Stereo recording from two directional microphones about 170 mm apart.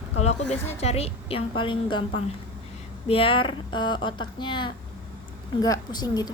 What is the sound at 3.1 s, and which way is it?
Speech, 30° left (ahead or behind).